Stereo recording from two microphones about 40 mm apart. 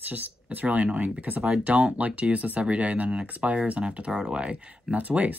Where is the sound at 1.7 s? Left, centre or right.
Right.